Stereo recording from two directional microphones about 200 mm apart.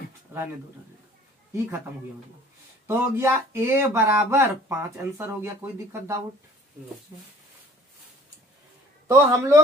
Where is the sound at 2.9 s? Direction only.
15° right (ahead or behind).